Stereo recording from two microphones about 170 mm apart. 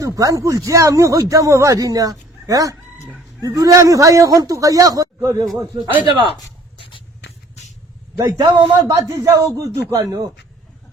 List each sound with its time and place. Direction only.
0.0 s speech: 20° right (ahead or behind)
8.2 s speech: 20° right (ahead or behind)